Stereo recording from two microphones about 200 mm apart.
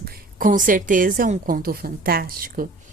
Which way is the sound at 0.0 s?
45° right (ahead or behind).